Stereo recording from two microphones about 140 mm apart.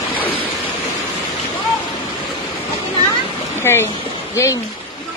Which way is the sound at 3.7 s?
20° left (ahead or behind).